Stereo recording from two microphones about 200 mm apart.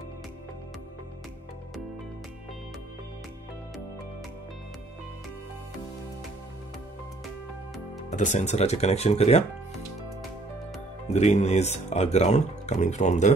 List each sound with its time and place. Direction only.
8.1 s speech: 35° left (ahead or behind)
11.1 s speech: 35° left (ahead or behind)